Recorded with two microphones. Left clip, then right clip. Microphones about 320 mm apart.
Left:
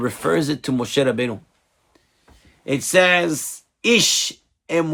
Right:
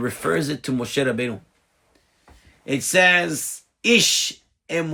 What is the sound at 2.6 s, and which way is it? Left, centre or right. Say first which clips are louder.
Speech: left 1 dB; centre.